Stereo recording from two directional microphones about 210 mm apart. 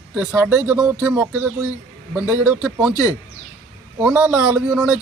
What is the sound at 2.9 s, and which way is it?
Speech, 15° left (ahead or behind).